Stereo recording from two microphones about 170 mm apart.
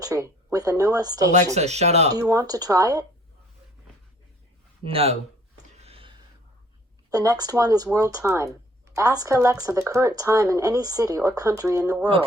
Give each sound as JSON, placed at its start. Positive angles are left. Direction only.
{"t": 0.0, "sound": "speech", "side_deg": -20}
{"t": 1.5, "sound": "speech", "side_deg": -40}
{"t": 2.1, "sound": "speech", "side_deg": -20}
{"t": 4.8, "sound": "speech", "side_deg": -35}
{"t": 5.6, "sound": "a sound", "side_deg": -40}
{"t": 7.1, "sound": "speech", "side_deg": -20}